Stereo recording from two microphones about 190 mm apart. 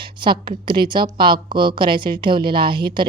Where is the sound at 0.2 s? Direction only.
25° right (ahead or behind).